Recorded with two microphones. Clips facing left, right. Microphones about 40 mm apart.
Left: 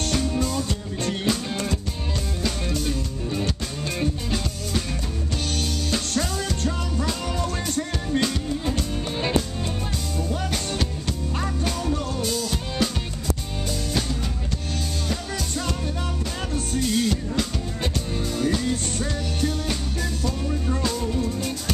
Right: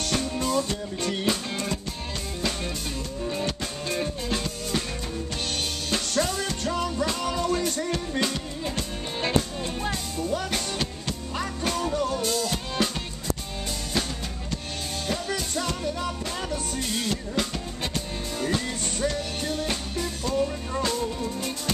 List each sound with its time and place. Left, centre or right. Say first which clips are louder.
0.1 s music: right 1 dB; centre
3.3 s music: left 1 dB; centre
5.9 s music: right 2 dB; centre
7.9 s music: left 2 dB; centre
11.6 s music: right 3 dB; centre
15.0 s music: even; centre
16.8 s music: left 5 dB; centre